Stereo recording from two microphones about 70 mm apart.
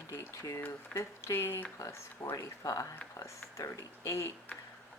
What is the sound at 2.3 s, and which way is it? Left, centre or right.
A woman's voice, left.